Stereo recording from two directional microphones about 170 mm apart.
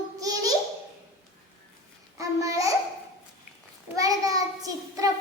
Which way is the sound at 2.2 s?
20° right (ahead or behind).